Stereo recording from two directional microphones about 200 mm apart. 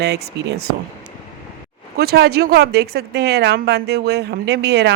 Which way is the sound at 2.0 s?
50° right (ahead or behind).